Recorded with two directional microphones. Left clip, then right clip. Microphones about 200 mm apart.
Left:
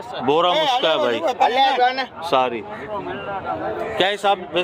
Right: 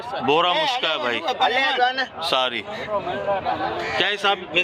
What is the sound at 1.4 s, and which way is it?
Speech, 55° left (ahead or behind).